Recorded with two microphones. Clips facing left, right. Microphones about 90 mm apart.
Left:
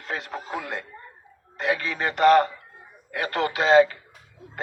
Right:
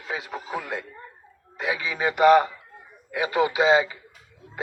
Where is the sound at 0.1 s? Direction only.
5° right (ahead or behind).